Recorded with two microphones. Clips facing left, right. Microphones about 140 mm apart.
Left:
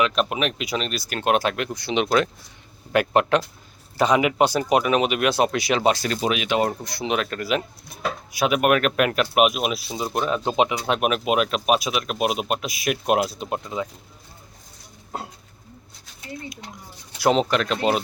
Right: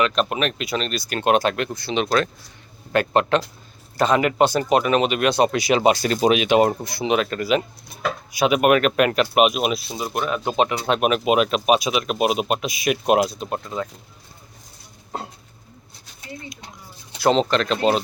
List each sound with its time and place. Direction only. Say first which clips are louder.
0.0 s speech: right 1 dB; 5° left (ahead or behind)
6.0 s speech: right 6 dB; 35° right (ahead or behind); by 6.8 s 20° right (ahead or behind)
6.8 s speech: right 4 dB; centre (ahead or behind)
10.5 s speech: right 1 dB; 15° left (ahead or behind)
10.8 s speech: right 3 dB; 5° left (ahead or behind)
13.4 s speech: right 1 dB; 15° left (ahead or behind)
15.1 s bird: right 1 dB; 5° left (ahead or behind)
17.2 s speech: right 1 dB; 10° left (ahead or behind)